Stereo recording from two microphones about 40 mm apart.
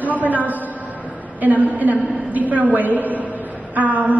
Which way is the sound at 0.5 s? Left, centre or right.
Right.